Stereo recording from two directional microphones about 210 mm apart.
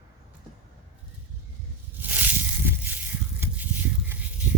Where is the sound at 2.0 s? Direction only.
10° right (ahead or behind).